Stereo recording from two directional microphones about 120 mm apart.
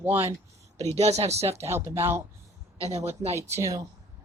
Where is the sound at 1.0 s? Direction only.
65° right (ahead or behind).